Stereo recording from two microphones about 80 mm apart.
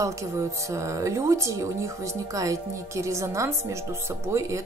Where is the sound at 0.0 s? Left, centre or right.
Right.